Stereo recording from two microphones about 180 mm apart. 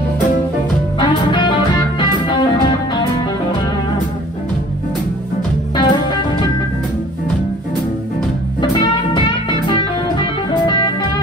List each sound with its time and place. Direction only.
0.9 s music: 25° left (ahead or behind)
5.8 s music: 25° left (ahead or behind)
8.5 s music: 25° left (ahead or behind)